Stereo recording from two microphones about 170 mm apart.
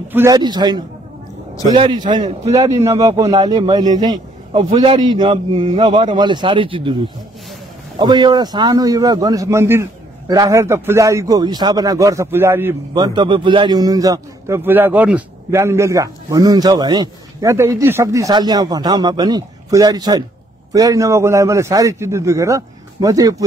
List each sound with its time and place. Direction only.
0.1 s a man's voice: 15° right (ahead or behind)
0.4 s a man's voice: 25° right (ahead or behind)
8.0 s a man's voice: 25° right (ahead or behind)
12.9 s a man's voice: 25° right (ahead or behind)